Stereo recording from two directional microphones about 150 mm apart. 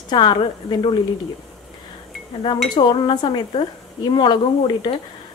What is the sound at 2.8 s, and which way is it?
A woman's voice, 30° left (ahead or behind).